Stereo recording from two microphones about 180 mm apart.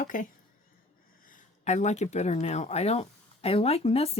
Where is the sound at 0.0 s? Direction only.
45° left (ahead or behind).